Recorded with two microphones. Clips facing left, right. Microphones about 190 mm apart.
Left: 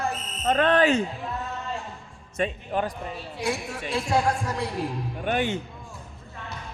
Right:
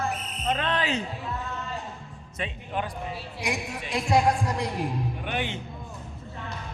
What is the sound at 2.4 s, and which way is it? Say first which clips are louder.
Speech: left 5 dB; 45° left (ahead or behind).